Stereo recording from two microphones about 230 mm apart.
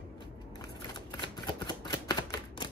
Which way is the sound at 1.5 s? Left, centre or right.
Centre.